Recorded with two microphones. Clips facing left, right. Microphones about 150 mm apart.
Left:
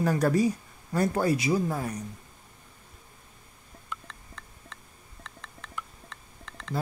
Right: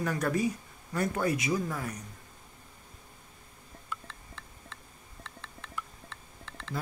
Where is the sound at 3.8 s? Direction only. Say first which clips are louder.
Left 1 dB; centre (ahead or behind).